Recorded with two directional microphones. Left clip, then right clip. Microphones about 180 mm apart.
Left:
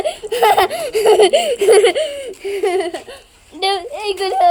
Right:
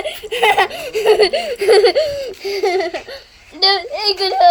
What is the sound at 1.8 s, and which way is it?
Speech, 15° left (ahead or behind).